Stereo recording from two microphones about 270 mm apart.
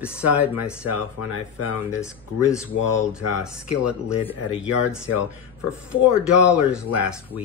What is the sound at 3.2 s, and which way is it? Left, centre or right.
Speech, left.